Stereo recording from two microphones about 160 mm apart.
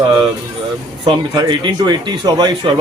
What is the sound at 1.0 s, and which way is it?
Speech, 25° right (ahead or behind).